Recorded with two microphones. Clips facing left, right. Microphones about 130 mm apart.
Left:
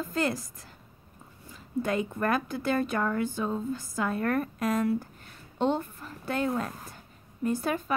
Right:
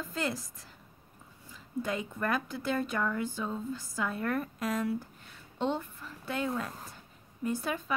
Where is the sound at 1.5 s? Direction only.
60° left (ahead or behind).